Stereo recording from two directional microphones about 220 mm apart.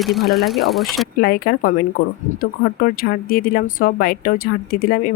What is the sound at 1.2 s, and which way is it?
Speech, 40° left (ahead or behind).